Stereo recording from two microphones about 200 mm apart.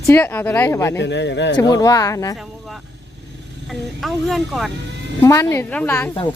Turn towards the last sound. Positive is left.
turn(degrees=10)  # may be behind; listen again after turning